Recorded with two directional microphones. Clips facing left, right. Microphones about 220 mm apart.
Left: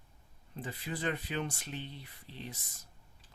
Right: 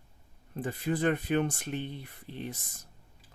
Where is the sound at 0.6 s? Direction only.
50° right (ahead or behind).